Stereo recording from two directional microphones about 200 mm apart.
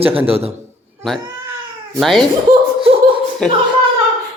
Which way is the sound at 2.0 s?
Centre (ahead or behind).